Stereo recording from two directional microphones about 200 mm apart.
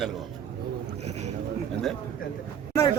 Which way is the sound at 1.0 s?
35° right (ahead or behind).